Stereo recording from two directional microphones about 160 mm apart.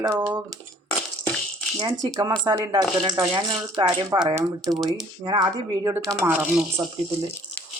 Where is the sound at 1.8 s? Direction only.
20° right (ahead or behind).